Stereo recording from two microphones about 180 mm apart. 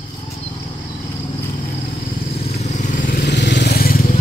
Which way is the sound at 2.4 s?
40° left (ahead or behind).